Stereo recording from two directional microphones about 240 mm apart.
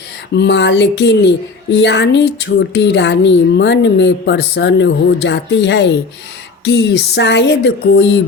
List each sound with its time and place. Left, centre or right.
0.3 s speech: left